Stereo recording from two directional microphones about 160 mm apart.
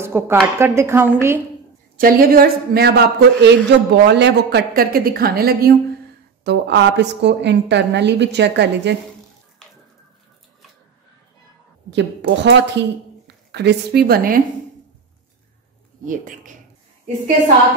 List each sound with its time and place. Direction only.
0.0 s a woman's voice: 15° right (ahead or behind)
2.0 s speech: 65° right (ahead or behind)
6.4 s a woman's voice: 90° right
11.9 s a woman's voice: 90° right; by 14.4 s 70° right (ahead or behind)
16.1 s speech: 55° right (ahead or behind)